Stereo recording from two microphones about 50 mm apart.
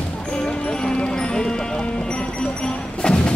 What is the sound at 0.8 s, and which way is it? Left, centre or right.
Music, centre.